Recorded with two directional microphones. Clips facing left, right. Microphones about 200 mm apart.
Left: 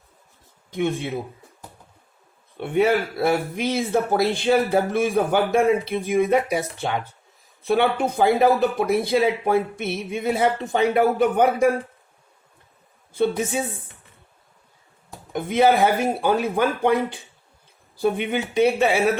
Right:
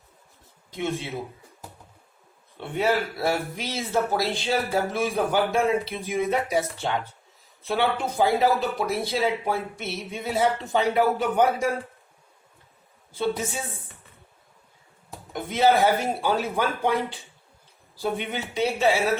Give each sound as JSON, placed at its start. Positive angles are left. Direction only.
{"t": 0.7, "sound": "speech", "side_deg": 55}
{"t": 2.6, "sound": "speech", "side_deg": 55}
{"t": 15.3, "sound": "a man's voice", "side_deg": 55}